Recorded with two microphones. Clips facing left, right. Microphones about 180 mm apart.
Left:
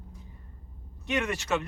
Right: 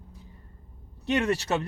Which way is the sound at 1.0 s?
35° right (ahead or behind).